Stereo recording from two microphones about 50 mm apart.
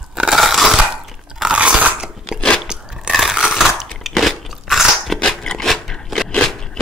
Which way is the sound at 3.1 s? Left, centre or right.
Centre.